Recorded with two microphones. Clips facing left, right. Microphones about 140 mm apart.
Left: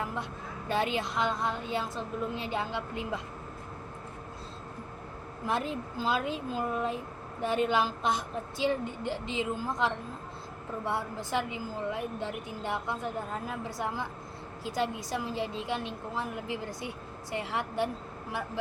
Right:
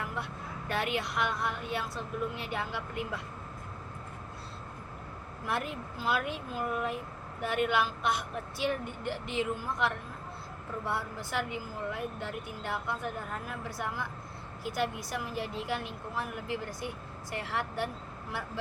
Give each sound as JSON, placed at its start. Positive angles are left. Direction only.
{"t": 0.7, "sound": "speech", "side_deg": 25}
{"t": 5.5, "sound": "speech", "side_deg": 25}
{"t": 15.1, "sound": "a woman's voice", "side_deg": 25}